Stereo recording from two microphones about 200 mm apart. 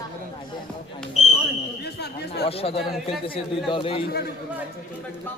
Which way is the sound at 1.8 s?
55° left (ahead or behind).